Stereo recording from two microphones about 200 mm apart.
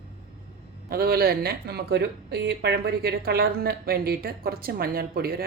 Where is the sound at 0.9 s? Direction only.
50° right (ahead or behind).